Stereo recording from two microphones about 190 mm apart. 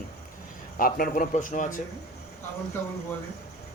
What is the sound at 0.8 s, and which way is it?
Speech, 50° left (ahead or behind).